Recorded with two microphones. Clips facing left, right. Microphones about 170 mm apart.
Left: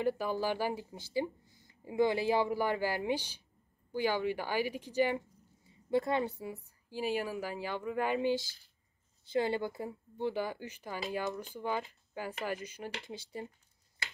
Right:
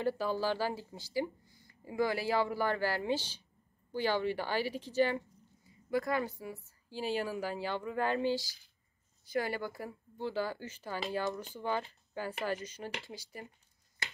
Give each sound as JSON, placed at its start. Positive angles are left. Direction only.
{"t": 0.0, "sound": "speech", "side_deg": 15}
{"t": 5.9, "sound": "speech", "side_deg": 25}
{"t": 13.1, "sound": "speech", "side_deg": 25}